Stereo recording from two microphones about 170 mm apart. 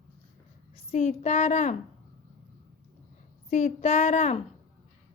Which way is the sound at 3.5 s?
45° left (ahead or behind).